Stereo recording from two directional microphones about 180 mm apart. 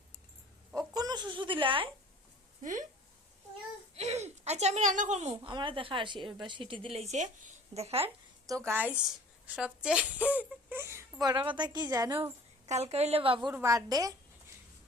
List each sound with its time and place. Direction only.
0.7 s chicken: 20° right (ahead or behind)
2.6 s speech: 45° right (ahead or behind)
3.9 s a woman's voice: 40° right (ahead or behind)
8.4 s a woman's voice: 15° right (ahead or behind)
12.6 s a woman's voice: 35° right (ahead or behind)
13.5 s a woman's voice: 15° right (ahead or behind)